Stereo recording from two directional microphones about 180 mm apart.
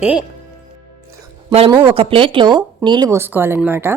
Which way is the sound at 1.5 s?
30° right (ahead or behind).